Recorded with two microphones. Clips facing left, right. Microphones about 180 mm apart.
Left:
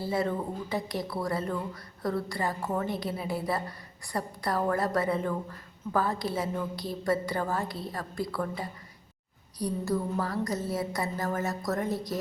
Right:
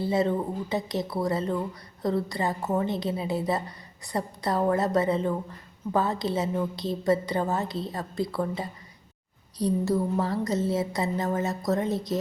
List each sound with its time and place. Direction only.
0.0 s a woman's voice: 20° right (ahead or behind)